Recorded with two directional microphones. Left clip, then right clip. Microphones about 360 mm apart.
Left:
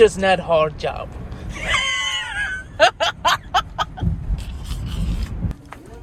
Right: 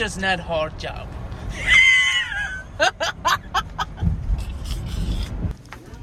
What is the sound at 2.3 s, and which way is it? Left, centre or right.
Snicker, centre.